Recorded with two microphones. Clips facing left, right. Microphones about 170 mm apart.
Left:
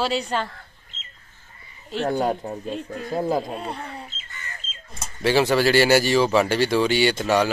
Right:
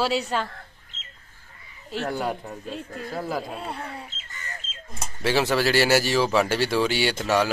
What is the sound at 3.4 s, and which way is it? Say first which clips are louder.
Speech: left 2 dB; 5° right (ahead or behind).